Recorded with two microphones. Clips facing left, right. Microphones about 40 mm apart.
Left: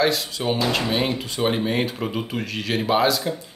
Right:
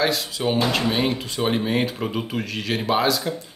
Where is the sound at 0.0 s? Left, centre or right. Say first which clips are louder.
Left 1 dB; centre.